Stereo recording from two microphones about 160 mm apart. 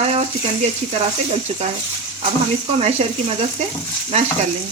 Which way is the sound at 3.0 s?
40° right (ahead or behind).